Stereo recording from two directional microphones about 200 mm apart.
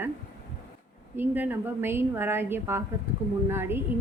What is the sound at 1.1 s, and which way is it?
A woman's voice, 10° right (ahead or behind).